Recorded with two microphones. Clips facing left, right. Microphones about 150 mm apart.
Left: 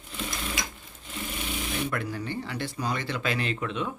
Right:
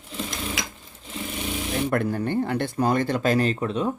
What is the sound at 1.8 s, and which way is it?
Speech, 50° right (ahead or behind).